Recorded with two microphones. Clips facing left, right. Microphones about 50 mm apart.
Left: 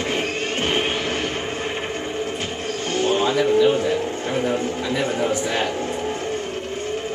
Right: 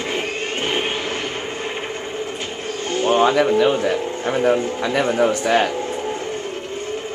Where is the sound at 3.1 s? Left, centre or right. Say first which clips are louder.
Right 4 dB; right.